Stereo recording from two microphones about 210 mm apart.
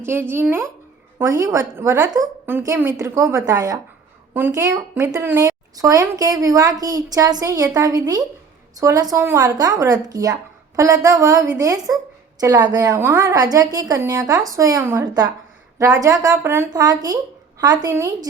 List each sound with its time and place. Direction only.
0.0 s speech: 10° right (ahead or behind)